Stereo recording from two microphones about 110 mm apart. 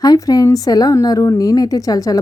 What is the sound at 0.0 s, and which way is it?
A woman's voice, 35° left (ahead or behind).